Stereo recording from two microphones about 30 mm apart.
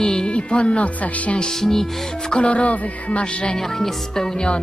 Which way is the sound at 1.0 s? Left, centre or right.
Left.